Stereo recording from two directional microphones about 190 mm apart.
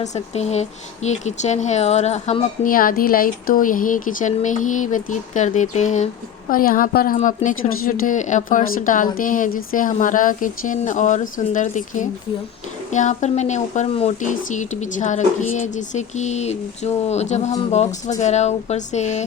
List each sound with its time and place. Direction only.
0.0 s a woman's voice: 35° left (ahead or behind)